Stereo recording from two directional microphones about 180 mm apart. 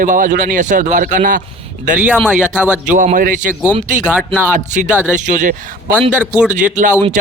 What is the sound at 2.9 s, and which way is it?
Speech, 45° right (ahead or behind).